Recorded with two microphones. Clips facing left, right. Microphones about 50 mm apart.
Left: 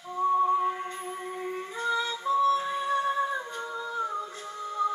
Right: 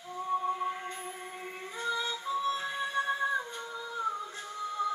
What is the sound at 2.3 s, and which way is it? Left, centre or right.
Music, left.